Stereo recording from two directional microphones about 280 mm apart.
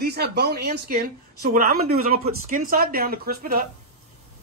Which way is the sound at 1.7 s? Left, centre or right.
Right.